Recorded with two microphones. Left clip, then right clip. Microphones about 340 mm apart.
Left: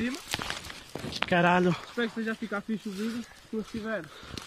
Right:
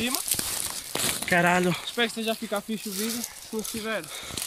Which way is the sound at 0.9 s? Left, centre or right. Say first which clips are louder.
Right 9 dB; right.